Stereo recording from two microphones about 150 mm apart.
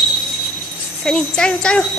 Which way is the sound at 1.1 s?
5° left (ahead or behind).